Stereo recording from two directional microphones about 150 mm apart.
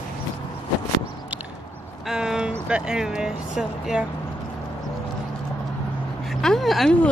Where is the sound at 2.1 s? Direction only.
5° right (ahead or behind).